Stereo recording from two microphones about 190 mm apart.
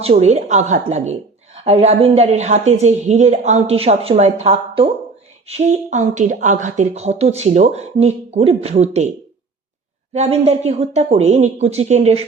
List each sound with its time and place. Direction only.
0.0 s speech: 35° right (ahead or behind)
10.1 s speech: 35° right (ahead or behind)